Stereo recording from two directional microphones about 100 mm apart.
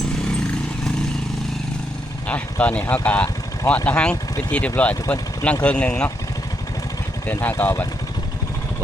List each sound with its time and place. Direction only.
2.2 s speech: 15° left (ahead or behind)
4.1 s speech: 25° left (ahead or behind)
4.8 s speech: 15° left (ahead or behind)
7.3 s speech: 20° left (ahead or behind)